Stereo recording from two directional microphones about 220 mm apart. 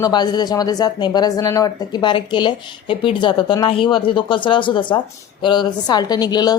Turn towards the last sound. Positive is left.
turn(degrees=20)  # may be behind; listen again after turning